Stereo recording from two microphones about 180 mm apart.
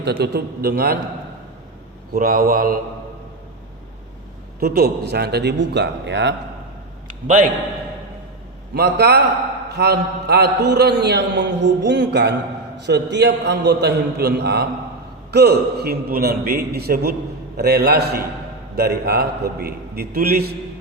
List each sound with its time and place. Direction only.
0.0 s a man's voice: 65° right (ahead or behind)
2.1 s mantra: 55° right (ahead or behind)
4.6 s a man's voice: 60° right (ahead or behind)
8.7 s a man's voice: 65° right (ahead or behind)